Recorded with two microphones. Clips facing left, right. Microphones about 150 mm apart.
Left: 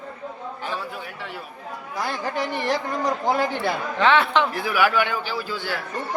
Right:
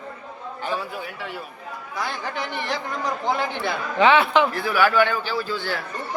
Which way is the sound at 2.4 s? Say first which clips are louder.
Left 5 dB; 40° left (ahead or behind).